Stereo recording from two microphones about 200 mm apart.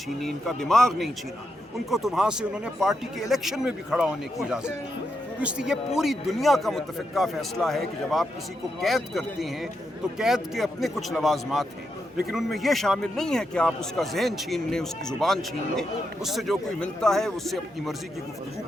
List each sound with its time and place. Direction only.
0.2 s a man's voice: centre (ahead or behind)